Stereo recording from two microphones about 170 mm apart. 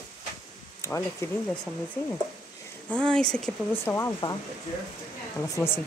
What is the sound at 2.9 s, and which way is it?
Speech, 5° left (ahead or behind).